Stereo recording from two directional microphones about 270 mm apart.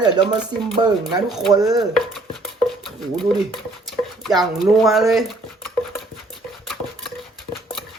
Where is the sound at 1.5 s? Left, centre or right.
Centre.